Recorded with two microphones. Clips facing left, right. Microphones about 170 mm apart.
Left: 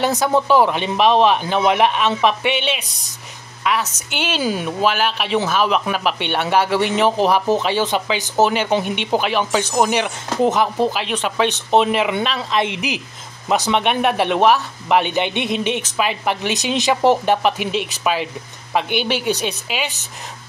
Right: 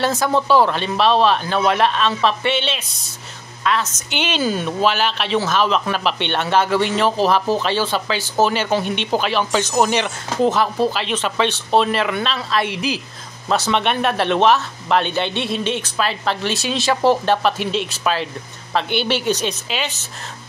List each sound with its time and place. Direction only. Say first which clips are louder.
0.0 s a woman's voice: left 1 dB; 15° left (ahead or behind)